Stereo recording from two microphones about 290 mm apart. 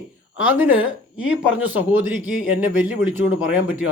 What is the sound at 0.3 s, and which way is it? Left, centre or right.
Speech, centre.